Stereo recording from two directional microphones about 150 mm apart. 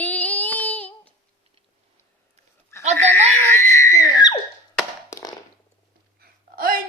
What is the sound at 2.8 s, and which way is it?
Goat, 50° right (ahead or behind).